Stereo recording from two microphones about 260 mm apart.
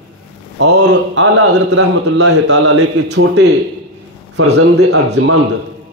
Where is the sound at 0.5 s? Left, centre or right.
Right.